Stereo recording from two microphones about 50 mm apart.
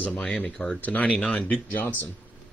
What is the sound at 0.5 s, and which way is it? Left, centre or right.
Speech, centre.